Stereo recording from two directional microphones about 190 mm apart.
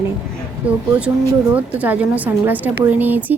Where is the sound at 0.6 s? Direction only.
5° right (ahead or behind).